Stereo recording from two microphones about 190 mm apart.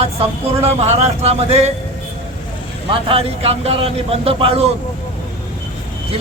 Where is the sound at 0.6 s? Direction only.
35° right (ahead or behind).